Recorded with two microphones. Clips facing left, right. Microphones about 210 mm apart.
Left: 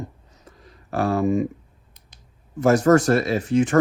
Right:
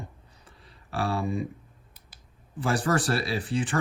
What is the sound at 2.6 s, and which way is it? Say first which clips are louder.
Speech: left 10 dB; 35° right (ahead or behind).